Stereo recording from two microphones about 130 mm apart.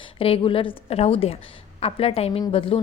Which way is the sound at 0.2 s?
45° left (ahead or behind).